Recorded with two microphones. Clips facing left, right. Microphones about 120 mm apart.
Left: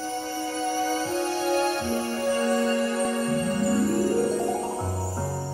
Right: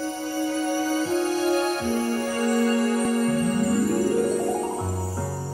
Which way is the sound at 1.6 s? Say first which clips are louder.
Right 1 dB; 30° left (ahead or behind).